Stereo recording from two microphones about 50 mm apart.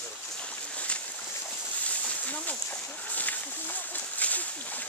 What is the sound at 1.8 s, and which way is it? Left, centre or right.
Splash, left.